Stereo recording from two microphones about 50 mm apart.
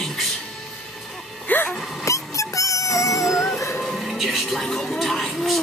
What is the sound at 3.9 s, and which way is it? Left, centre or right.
Music, centre.